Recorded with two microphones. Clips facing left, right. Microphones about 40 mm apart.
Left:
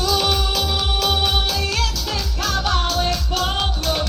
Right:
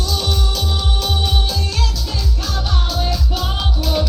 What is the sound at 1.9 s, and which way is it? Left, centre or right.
Music, left.